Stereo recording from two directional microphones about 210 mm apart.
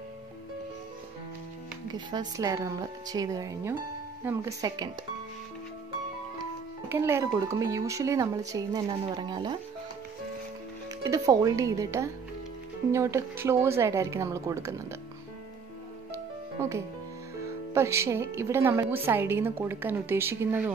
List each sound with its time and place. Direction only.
1.9 s speech: 20° right (ahead or behind)
6.9 s speech: 15° right (ahead or behind)
11.1 s speech: 15° right (ahead or behind)
16.5 s speech: 15° right (ahead or behind)